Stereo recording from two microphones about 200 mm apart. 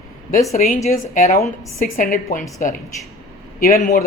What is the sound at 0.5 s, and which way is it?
A woman's voice, 45° left (ahead or behind).